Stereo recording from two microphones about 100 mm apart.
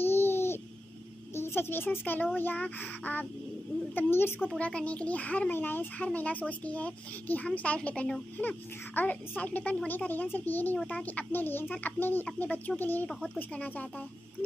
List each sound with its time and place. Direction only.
0.0 s babbling: 25° left (ahead or behind)
1.3 s a woman's voice: 25° left (ahead or behind)